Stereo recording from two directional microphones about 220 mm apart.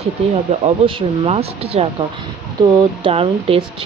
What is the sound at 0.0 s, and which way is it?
Speech, 30° right (ahead or behind).